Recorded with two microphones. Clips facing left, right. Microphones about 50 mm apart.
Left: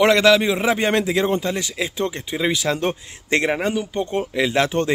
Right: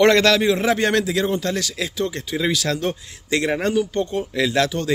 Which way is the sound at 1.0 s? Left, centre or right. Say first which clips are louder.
Left 1 dB; left.